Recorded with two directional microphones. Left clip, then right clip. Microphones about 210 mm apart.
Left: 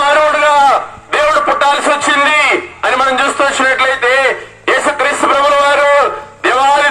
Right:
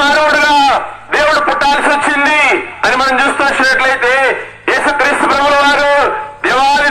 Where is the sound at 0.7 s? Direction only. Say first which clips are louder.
Even; 40° left (ahead or behind).